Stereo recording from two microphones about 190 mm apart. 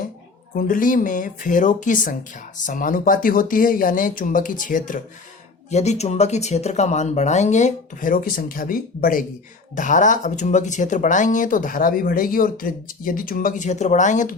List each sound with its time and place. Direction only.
0.5 s speech: 45° left (ahead or behind)